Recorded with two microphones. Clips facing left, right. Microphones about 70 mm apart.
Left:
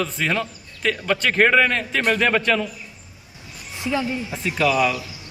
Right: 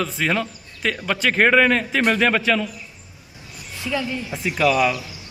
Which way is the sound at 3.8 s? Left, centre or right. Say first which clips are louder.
Left 1 dB; left.